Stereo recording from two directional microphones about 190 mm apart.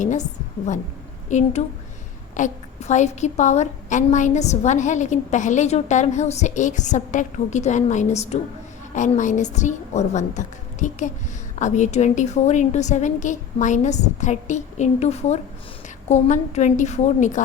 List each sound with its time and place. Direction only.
0.0 s a woman's voice: 40° left (ahead or behind)